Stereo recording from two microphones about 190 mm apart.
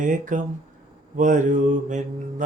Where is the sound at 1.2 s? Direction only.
40° right (ahead or behind).